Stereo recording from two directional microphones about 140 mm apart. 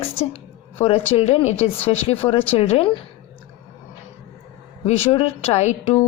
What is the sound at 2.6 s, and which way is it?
Speech, 45° left (ahead or behind).